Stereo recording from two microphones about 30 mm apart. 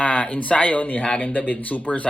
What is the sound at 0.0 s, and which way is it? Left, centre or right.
Speech, left.